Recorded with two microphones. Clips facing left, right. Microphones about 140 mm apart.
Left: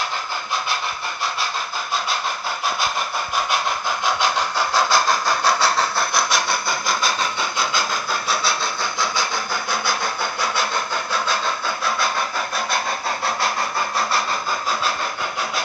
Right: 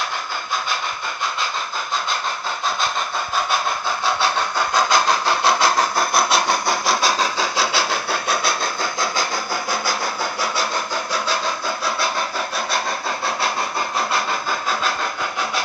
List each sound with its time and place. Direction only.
4.8 s vehicle: 20° right (ahead or behind)
5.6 s sawing: 45° right (ahead or behind)
6.2 s vehicle: 35° right (ahead or behind)
6.7 s vehicle: 90° right
7.2 s engine: 90° right; by 8.5 s 65° right (ahead or behind)